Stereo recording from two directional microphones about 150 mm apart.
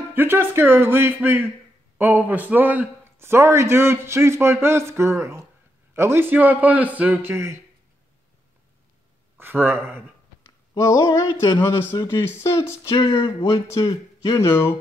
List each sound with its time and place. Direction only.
0.1 s speech: 15° right (ahead or behind)
9.4 s speech: 15° right (ahead or behind)
10.7 s speech: 25° left (ahead or behind)
13.1 s speech: 35° left (ahead or behind); by 14.7 s 15° left (ahead or behind)